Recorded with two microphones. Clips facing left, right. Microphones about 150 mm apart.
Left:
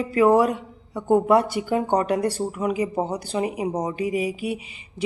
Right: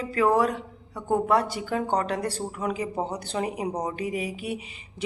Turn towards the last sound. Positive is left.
turn(degrees=5)  # may be behind; listen again after turning